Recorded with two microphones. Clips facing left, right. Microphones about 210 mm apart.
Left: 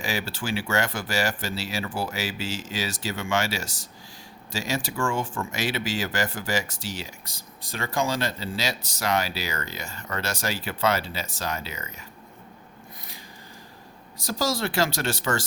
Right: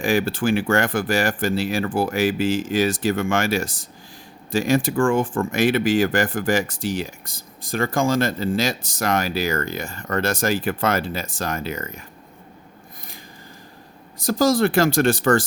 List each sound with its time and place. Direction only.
0.0 s speech: 55° right (ahead or behind)
14.2 s speech: 50° right (ahead or behind)